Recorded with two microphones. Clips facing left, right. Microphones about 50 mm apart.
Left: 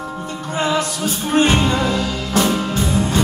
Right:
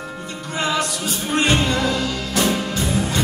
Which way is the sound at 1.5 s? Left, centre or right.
Left.